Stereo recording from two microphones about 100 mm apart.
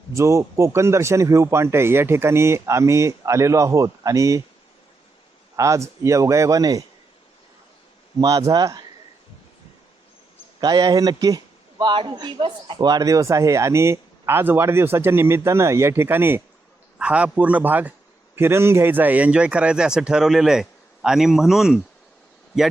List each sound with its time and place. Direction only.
0.1 s a man's voice: 30° right (ahead or behind)
5.5 s a man's voice: 30° right (ahead or behind)
8.2 s a man's voice: 35° right (ahead or behind)
10.6 s a man's voice: 40° right (ahead or behind); by 21.8 s 5° right (ahead or behind)